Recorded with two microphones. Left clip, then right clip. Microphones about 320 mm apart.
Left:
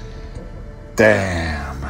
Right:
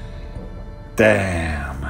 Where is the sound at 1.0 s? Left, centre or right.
Centre.